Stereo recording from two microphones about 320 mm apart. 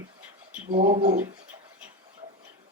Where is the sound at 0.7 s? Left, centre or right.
Right.